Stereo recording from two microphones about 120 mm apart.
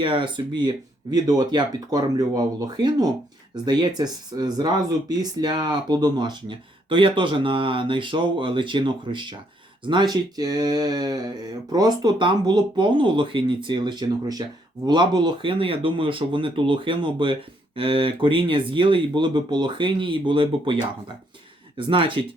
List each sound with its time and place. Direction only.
0.0 s speech: 45° right (ahead or behind)
21.8 s speech: 45° right (ahead or behind)